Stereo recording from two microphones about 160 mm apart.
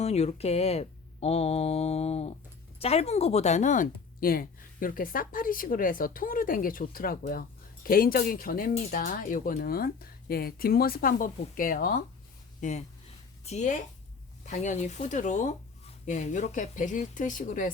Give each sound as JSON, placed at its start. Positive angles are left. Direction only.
{"t": 0.0, "sound": "speech", "side_deg": 40}
{"t": 12.5, "sound": "speech", "side_deg": 50}